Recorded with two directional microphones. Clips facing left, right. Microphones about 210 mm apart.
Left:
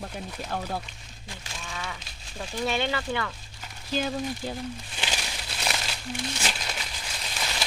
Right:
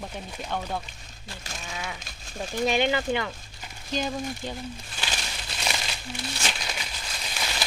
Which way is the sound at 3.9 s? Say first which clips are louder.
Left 1 dB; 5° left (ahead or behind).